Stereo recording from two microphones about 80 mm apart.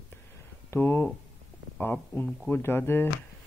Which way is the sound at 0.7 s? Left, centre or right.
Left.